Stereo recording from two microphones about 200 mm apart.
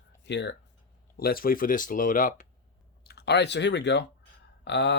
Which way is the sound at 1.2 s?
50° left (ahead or behind).